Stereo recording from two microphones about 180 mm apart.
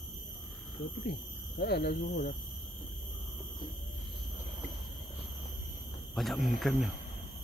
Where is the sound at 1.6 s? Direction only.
65° left (ahead or behind).